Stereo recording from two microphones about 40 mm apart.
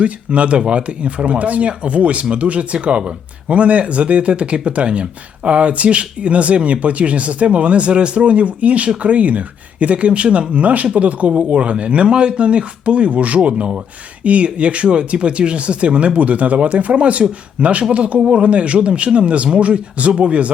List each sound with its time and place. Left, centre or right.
0.0 s speech: right